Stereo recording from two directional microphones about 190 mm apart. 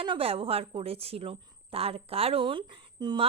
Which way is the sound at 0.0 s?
30° right (ahead or behind).